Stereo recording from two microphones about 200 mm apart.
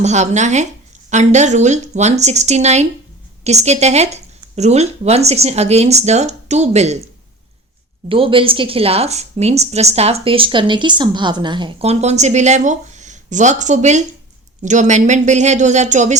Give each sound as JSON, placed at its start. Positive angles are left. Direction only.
{"t": 0.0, "sound": "a woman's voice", "side_deg": -35}
{"t": 8.1, "sound": "a woman's voice", "side_deg": -25}